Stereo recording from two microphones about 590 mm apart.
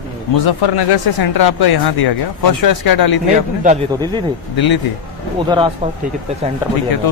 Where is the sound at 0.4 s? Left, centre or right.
Left.